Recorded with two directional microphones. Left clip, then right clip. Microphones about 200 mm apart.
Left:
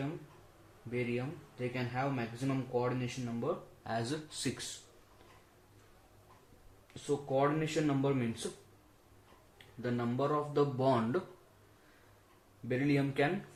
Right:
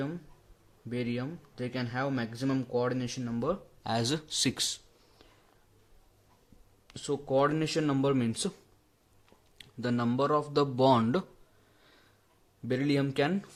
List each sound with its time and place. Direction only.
0.9 s speech: 45° right (ahead or behind)
6.8 s speech: 50° right (ahead or behind)
9.6 s speech: 55° right (ahead or behind)
12.6 s speech: 50° right (ahead or behind)